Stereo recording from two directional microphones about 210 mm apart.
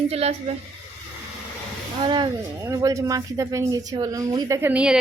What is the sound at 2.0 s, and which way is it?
Speech, 20° right (ahead or behind).